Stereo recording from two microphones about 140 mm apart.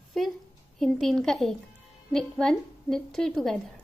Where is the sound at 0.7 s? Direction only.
Centre (ahead or behind).